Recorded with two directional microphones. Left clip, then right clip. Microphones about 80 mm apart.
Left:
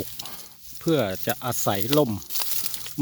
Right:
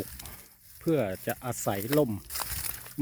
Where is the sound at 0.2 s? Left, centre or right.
Left.